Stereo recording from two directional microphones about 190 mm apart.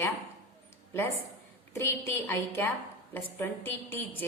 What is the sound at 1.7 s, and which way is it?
A woman's voice, 15° left (ahead or behind).